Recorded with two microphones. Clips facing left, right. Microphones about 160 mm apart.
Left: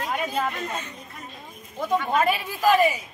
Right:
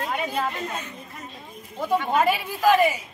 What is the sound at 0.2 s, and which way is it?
Speech, 20° right (ahead or behind).